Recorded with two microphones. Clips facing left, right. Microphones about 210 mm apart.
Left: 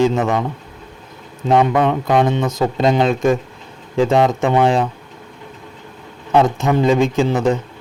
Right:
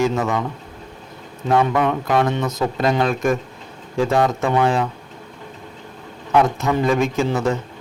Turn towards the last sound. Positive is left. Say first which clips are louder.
# left 4 dB
turn(degrees=15)  # may be behind; listen again after turning